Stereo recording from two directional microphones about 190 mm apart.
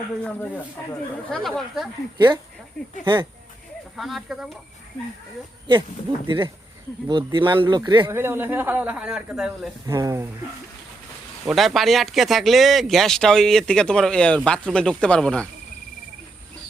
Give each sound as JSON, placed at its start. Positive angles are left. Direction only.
{"t": 1.3, "sound": "speech", "side_deg": 0}
{"t": 2.1, "sound": "speech", "side_deg": -20}
{"t": 3.9, "sound": "speech", "side_deg": 0}
{"t": 6.2, "sound": "a man's voice", "side_deg": -25}
{"t": 9.8, "sound": "a man's voice", "side_deg": -15}
{"t": 11.4, "sound": "speech", "side_deg": 0}